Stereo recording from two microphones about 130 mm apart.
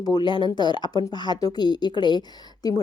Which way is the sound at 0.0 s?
35° left (ahead or behind).